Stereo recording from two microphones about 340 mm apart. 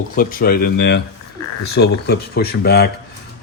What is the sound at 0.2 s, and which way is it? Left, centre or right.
Speech, left.